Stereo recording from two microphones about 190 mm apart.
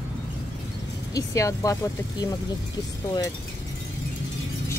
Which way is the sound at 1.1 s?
15° left (ahead or behind).